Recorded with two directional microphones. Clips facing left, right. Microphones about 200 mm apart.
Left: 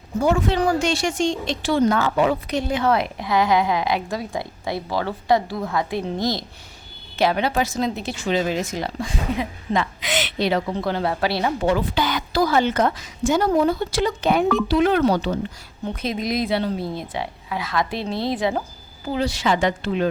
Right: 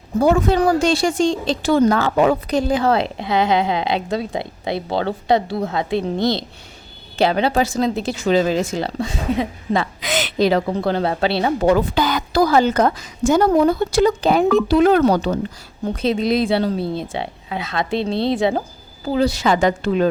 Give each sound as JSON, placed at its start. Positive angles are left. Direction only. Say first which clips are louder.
{"t": 0.3, "sound": "speech", "louder": "right 4 dB", "side_deg": -40}
{"t": 2.1, "sound": "a woman's voice", "louder": "right 4 dB", "side_deg": -45}
{"t": 6.1, "sound": "speech", "louder": "right 4 dB", "side_deg": -65}
{"t": 7.2, "sound": "speech", "louder": "right 3 dB", "side_deg": -30}
{"t": 11.6, "sound": "speech", "louder": "right 6 dB", "side_deg": -45}
{"t": 13.6, "sound": "speech", "louder": "right 5 dB", "side_deg": -50}
{"t": 14.2, "sound": "a woman's voice", "louder": "right 4 dB", "side_deg": -35}